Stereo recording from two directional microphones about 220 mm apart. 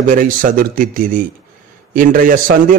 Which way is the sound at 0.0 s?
40° right (ahead or behind).